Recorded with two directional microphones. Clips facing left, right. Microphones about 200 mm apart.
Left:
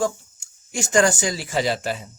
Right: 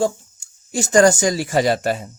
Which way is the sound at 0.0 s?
35° right (ahead or behind).